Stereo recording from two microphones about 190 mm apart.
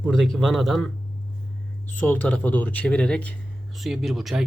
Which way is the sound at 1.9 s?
10° left (ahead or behind).